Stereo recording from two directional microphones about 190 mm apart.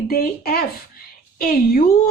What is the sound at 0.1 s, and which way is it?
A woman's voice, 50° left (ahead or behind).